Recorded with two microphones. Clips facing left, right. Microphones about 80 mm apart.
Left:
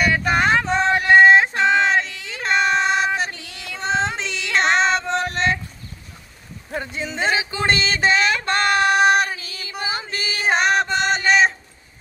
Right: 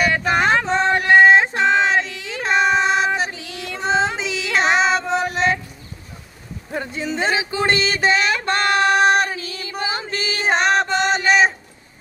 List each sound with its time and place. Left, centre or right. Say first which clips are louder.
0.0 s a sound: right 1 dB; centre
3.2 s child singing: right 2 dB; centre
7.2 s music: right 1 dB; right
8.9 s female singing: right 1 dB; centre